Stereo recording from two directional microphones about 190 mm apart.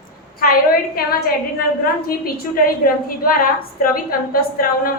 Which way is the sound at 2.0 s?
50° left (ahead or behind).